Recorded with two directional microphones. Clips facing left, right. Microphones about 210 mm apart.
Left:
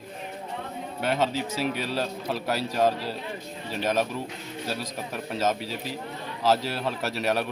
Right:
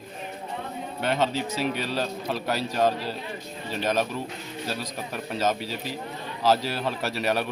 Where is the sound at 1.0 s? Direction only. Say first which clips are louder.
Even; 5° left (ahead or behind).